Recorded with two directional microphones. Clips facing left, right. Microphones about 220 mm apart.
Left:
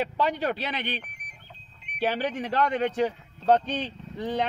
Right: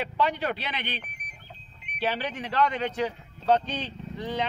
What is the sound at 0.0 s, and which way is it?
Speech, 40° left (ahead or behind).